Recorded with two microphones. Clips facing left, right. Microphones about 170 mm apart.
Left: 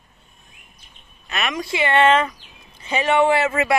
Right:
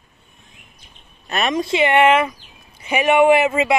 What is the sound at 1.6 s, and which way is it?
Speech, 20° right (ahead or behind).